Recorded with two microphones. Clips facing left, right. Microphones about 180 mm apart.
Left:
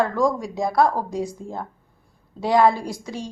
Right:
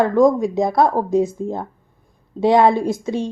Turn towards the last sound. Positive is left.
turn(degrees=-25)  # may be behind; listen again after turning